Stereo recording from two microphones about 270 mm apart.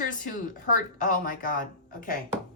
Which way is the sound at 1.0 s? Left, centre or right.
Left.